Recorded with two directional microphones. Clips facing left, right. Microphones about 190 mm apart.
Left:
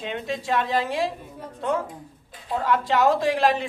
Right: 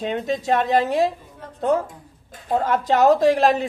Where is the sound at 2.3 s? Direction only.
45° right (ahead or behind).